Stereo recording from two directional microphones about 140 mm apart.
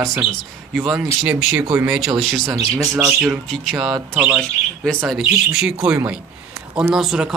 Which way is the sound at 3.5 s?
Centre (ahead or behind).